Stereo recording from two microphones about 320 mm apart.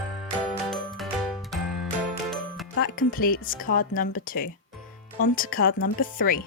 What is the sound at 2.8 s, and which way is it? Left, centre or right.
Speech, left.